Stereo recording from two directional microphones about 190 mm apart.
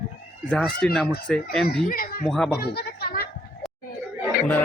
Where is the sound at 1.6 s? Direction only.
50° left (ahead or behind).